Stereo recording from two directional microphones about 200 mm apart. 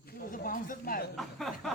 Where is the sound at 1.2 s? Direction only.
Centre (ahead or behind).